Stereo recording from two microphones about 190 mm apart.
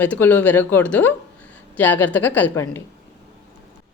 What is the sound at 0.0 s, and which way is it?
Speech, 10° left (ahead or behind).